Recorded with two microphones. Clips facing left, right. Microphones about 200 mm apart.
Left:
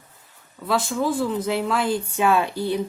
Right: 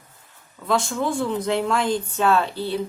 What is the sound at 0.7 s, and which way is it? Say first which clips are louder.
Speech: even; centre (ahead or behind).